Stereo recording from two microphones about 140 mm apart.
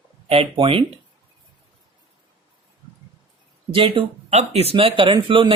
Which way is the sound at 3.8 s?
40° right (ahead or behind).